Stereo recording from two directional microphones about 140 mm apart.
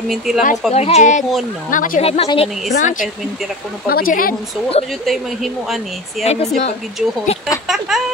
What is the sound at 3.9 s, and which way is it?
Speech, 90° left.